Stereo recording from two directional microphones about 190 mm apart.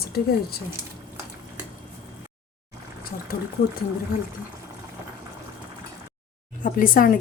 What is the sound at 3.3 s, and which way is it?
Speech, 50° left (ahead or behind).